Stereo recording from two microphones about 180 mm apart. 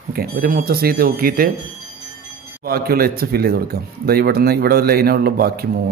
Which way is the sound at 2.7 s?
55° right (ahead or behind).